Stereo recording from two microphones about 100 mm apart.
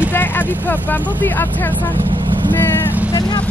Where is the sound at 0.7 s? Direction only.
15° left (ahead or behind).